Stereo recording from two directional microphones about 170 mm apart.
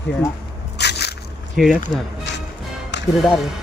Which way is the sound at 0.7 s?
80° left.